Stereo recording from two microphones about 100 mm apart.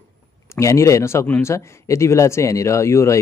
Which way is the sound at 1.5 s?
30° left (ahead or behind).